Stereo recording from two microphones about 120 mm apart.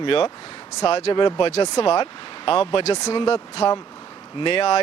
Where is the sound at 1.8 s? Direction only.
50° left (ahead or behind); by 3.2 s 65° left (ahead or behind).